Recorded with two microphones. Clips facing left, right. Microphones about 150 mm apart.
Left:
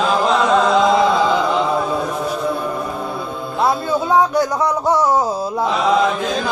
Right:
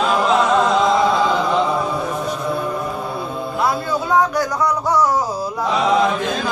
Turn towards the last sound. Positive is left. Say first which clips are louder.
# left 1 dB
turn(degrees=25)  # may be behind; listen again after turning